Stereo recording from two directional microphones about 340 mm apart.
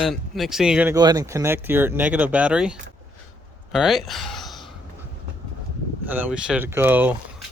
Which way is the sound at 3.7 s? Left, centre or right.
Centre.